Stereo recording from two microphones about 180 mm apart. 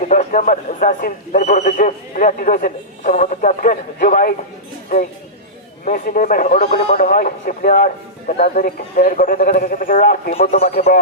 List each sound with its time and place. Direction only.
0.1 s speech: 45° left (ahead or behind)
5.8 s speech: 50° left (ahead or behind)